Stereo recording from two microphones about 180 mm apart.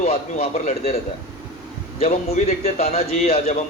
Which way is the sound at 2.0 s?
40° left (ahead or behind).